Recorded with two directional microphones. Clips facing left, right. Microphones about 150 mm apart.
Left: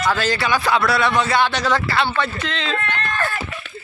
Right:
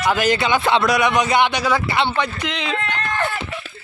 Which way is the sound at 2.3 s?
15° right (ahead or behind).